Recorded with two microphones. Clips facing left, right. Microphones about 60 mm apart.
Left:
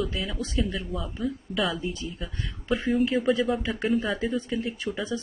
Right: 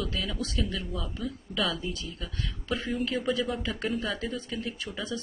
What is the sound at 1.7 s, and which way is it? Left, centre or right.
Speech, left.